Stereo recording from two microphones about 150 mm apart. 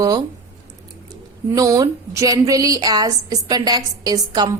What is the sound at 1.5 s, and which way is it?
A woman's voice, 20° right (ahead or behind).